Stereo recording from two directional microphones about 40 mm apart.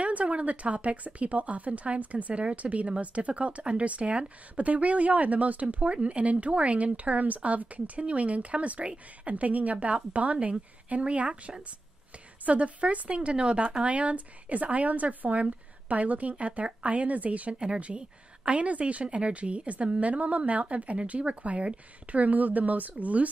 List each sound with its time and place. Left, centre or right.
0.0 s speech: right
17.6 s speech: right